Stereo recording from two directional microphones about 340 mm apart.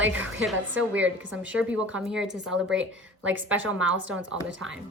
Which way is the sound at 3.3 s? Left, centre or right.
Centre.